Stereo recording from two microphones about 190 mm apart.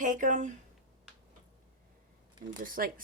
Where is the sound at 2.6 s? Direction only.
45° right (ahead or behind).